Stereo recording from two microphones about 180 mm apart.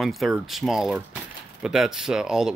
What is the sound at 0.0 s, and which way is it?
Speech, centre (ahead or behind).